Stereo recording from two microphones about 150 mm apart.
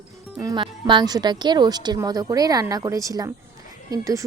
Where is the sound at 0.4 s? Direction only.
30° right (ahead or behind).